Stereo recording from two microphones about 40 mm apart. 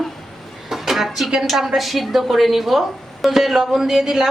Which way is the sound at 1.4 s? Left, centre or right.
Centre.